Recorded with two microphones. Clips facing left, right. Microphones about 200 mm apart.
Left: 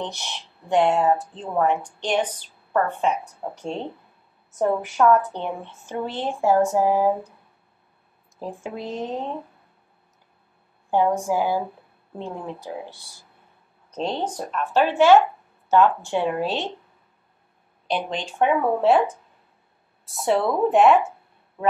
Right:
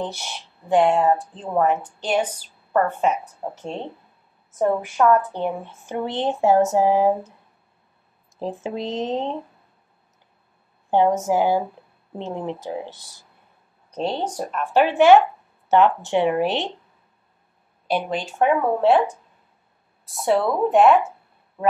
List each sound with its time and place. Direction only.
0.0 s speech: 5° right (ahead or behind)
4.6 s a woman's voice: centre (ahead or behind); by 7.1 s 20° right (ahead or behind)
8.4 s a woman's voice: 20° right (ahead or behind)
10.9 s a woman's voice: 20° right (ahead or behind)
13.8 s speech: 10° right (ahead or behind)
17.8 s speech: 10° right (ahead or behind)
20.1 s speech: centre (ahead or behind)